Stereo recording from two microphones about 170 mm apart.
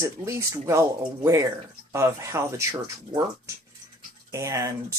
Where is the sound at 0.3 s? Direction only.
15° right (ahead or behind).